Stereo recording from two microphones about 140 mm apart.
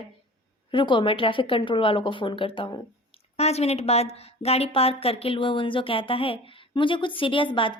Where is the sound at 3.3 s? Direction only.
50° left (ahead or behind).